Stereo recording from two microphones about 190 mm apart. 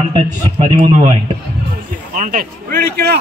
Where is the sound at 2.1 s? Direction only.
45° right (ahead or behind).